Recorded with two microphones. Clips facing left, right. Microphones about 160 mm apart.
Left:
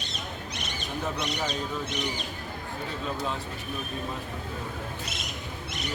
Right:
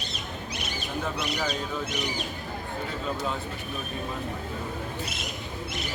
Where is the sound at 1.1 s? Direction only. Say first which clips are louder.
Right 1 dB; 5° right (ahead or behind).